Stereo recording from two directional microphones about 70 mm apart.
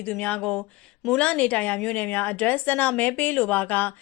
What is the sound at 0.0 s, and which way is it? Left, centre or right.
Speech, left.